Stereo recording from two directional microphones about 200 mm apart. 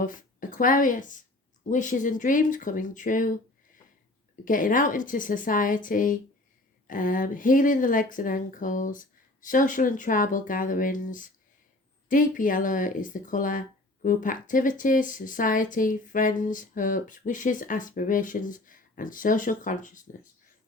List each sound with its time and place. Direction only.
0.0 s a woman's voice: 40° left (ahead or behind)
4.4 s speech: 40° left (ahead or behind)